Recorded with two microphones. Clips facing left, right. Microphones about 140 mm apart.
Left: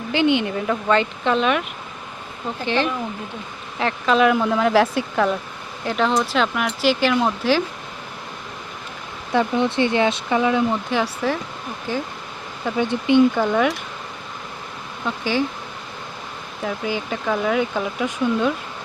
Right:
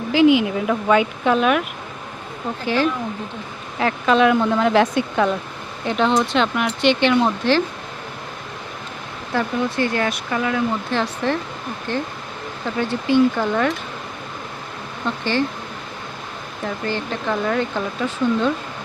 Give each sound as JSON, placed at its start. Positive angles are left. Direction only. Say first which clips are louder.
{"t": 0.1, "sound": "speech", "louder": "right 4 dB", "side_deg": 0}
{"t": 2.6, "sound": "speech", "louder": "right 2 dB", "side_deg": -5}
{"t": 9.3, "sound": "speech", "louder": "left 2 dB", "side_deg": 20}
{"t": 13.3, "sound": "speech", "louder": "left 1 dB", "side_deg": 10}
{"t": 15.0, "sound": "speech", "louder": "right 1 dB", "side_deg": 10}
{"t": 16.6, "sound": "speech", "louder": "even", "side_deg": 10}